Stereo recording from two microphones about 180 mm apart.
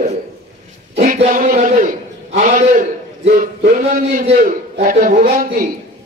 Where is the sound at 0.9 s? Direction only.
40° right (ahead or behind).